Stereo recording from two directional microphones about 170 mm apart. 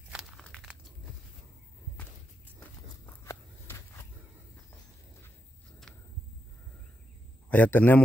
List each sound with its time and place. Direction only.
0.1 s crumpling: centre (ahead or behind)
3.3 s a sound: 15° left (ahead or behind)
7.4 s a man's voice: 10° left (ahead or behind)